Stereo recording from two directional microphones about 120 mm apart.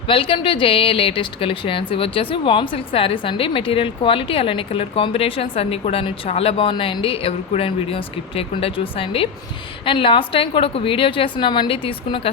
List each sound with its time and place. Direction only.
0.1 s a woman's voice: 45° left (ahead or behind)